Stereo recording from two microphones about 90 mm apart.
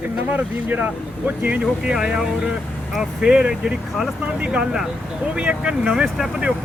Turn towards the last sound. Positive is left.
turn(degrees=-5)  # may be behind; listen again after turning